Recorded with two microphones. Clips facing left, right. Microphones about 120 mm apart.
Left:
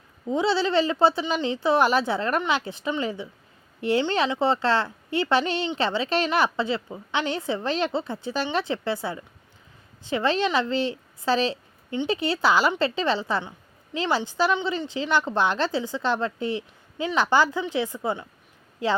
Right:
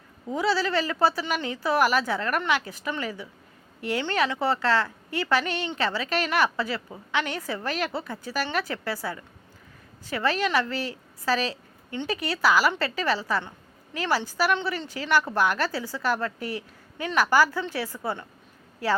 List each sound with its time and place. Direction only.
0.3 s a woman's voice: 25° left (ahead or behind)